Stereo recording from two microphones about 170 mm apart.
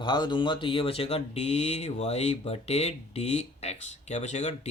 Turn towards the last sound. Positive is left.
turn(degrees=40)  # may be behind; listen again after turning